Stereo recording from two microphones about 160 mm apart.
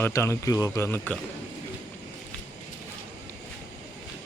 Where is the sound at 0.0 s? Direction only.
15° left (ahead or behind).